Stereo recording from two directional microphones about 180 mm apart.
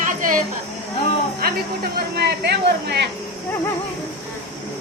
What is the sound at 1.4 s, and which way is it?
Speech, 55° right (ahead or behind).